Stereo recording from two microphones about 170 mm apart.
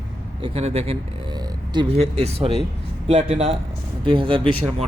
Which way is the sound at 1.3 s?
25° right (ahead or behind).